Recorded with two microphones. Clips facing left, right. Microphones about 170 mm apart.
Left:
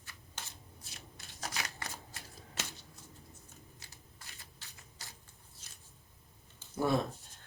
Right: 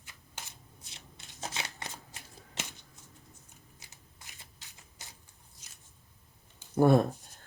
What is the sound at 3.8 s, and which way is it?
Shuffling cards, 20° right (ahead or behind).